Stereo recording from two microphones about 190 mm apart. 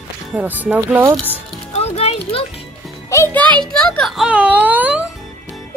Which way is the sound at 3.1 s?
10° left (ahead or behind).